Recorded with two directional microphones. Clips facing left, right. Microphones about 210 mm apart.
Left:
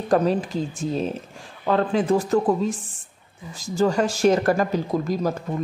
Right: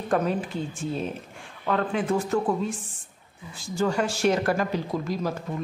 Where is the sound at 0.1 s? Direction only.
35° left (ahead or behind).